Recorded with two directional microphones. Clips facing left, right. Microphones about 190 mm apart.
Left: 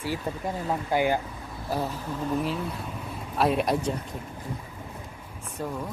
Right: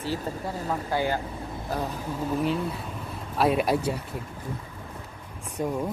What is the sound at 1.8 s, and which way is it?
Speech, 5° right (ahead or behind).